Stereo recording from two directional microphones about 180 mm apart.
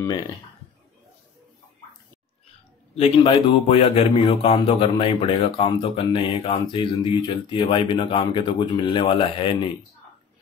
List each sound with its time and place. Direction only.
3.0 s a man's voice: 30° left (ahead or behind)